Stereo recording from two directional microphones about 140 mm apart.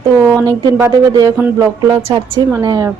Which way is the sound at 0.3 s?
30° right (ahead or behind).